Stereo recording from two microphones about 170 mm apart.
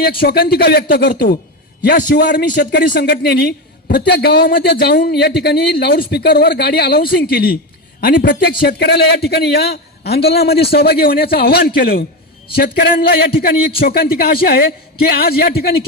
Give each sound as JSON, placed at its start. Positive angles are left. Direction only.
{"t": 0.0, "sound": "a man's voice", "side_deg": 65}